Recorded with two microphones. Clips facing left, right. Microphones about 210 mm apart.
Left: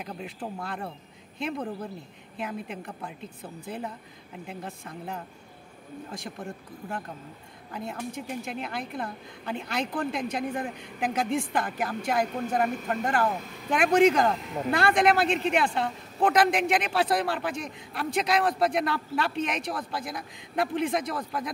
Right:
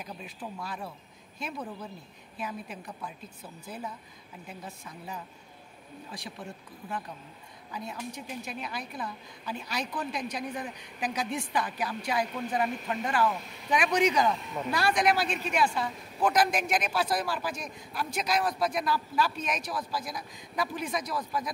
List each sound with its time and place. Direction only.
0.6 s a woman's voice: 60° left (ahead or behind)
7.7 s a woman's voice: 55° left (ahead or behind)